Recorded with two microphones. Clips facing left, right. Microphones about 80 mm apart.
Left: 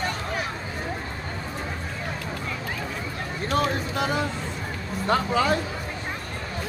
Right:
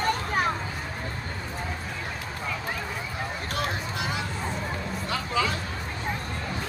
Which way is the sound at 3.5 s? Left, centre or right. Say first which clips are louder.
Left 9 dB; left.